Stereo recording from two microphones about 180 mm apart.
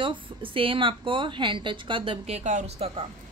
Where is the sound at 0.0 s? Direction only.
30° right (ahead or behind).